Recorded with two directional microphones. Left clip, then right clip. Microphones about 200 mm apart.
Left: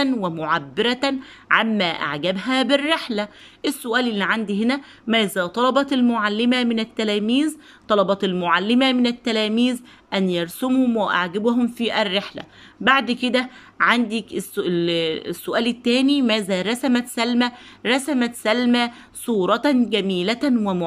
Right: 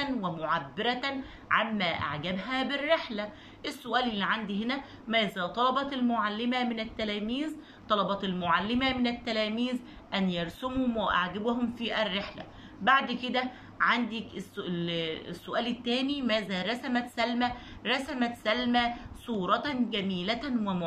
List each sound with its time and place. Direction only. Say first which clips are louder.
0.0 s a woman's voice: left 10 dB; 50° left (ahead or behind)